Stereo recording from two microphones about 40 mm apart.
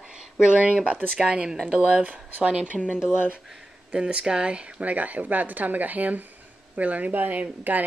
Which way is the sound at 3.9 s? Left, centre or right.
Right.